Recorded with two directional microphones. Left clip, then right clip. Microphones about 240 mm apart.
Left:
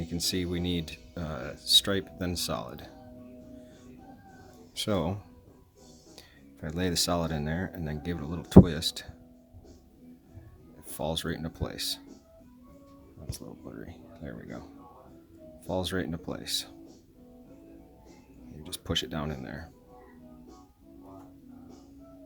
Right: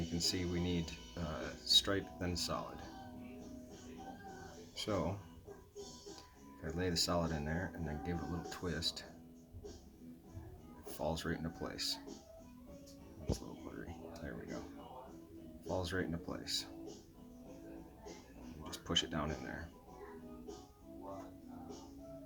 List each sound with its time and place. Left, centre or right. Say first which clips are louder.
0.2 s speech: left 7 dB; left
4.7 s speech: left 8 dB; left
6.6 s speech: left 7 dB; left
10.9 s speech: left 7 dB; left
13.7 s speech: left 4 dB; left
15.7 s speech: left 7 dB; left
18.6 s speech: left 5 dB; left